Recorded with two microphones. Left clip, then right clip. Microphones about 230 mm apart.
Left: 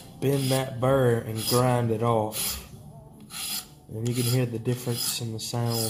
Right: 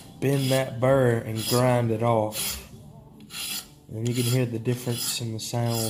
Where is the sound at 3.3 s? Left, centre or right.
Centre.